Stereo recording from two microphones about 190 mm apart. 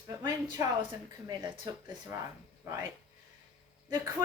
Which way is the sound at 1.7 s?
20° right (ahead or behind).